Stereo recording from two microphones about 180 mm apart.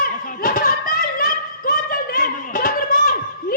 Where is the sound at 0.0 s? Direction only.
50° left (ahead or behind).